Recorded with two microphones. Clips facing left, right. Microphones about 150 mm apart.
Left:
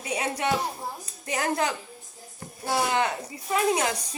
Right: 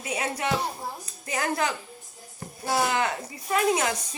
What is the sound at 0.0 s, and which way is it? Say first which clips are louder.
A woman's voice: left 1 dB; 30° left (ahead or behind).